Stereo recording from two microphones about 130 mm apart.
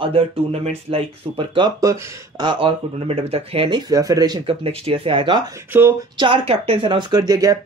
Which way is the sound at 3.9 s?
30° right (ahead or behind).